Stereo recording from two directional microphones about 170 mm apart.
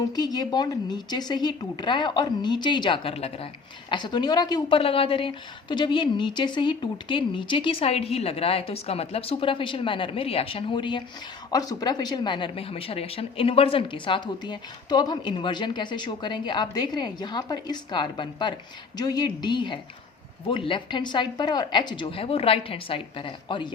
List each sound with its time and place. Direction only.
0.0 s a woman's voice: 25° left (ahead or behind)